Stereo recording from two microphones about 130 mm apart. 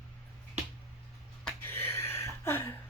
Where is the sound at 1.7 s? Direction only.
20° left (ahead or behind).